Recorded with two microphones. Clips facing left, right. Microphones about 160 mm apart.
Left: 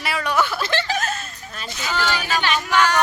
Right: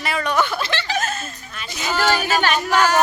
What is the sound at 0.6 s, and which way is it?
Chuckle, 45° left (ahead or behind).